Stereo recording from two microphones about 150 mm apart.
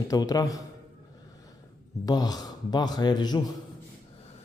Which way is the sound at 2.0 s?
25° left (ahead or behind).